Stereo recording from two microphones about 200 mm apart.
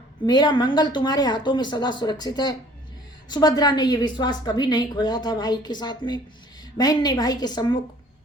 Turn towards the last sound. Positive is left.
turn(degrees=20)  # may be behind; listen again after turning